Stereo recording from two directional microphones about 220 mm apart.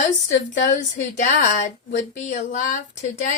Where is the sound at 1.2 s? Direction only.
35° left (ahead or behind).